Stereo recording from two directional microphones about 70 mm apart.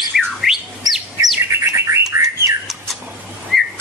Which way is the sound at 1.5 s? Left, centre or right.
Right.